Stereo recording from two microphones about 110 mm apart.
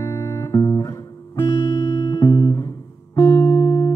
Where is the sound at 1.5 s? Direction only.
45° left (ahead or behind).